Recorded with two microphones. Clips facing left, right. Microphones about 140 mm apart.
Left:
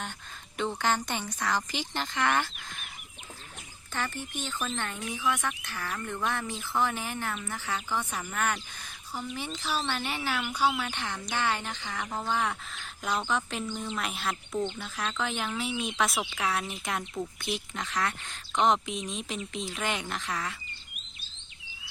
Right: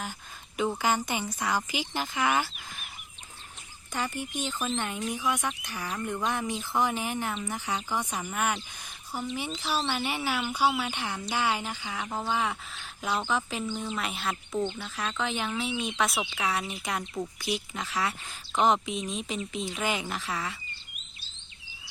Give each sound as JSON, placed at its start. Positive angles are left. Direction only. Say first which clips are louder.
{"t": 0.5, "sound": "speech", "louder": "right 2 dB", "side_deg": -5}
{"t": 3.9, "sound": "speech", "louder": "right 2 dB", "side_deg": -15}